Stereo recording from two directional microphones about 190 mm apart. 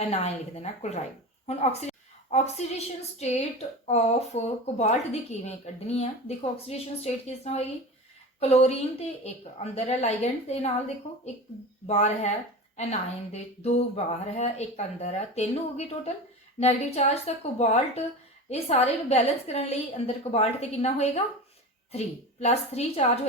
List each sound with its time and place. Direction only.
0.1 s a woman's voice: 35° left (ahead or behind)